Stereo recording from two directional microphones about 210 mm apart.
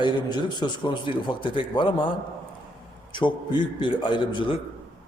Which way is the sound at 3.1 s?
20° left (ahead or behind).